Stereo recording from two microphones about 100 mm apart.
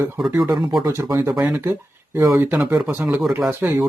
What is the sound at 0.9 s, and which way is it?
Speech, 30° right (ahead or behind).